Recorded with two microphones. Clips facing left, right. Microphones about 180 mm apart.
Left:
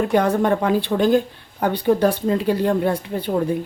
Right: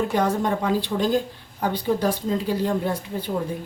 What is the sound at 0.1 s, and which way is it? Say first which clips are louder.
Speech: left 5 dB; 60° left (ahead or behind).